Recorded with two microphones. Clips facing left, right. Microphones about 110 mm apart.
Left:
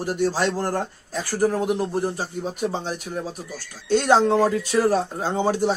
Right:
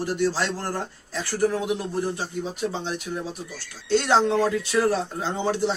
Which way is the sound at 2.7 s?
45° left (ahead or behind).